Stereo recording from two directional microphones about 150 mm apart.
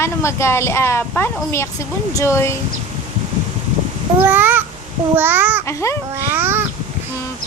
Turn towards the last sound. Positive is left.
turn(degrees=-15)  # may be behind; listen again after turning